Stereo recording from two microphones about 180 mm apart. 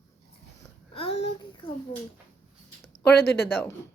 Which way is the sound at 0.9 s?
35° left (ahead or behind).